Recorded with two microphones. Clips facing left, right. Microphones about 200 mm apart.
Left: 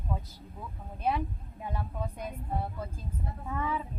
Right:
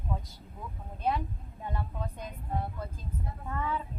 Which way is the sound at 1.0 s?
10° left (ahead or behind).